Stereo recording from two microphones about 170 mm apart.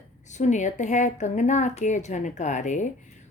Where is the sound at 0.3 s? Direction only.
45° left (ahead or behind).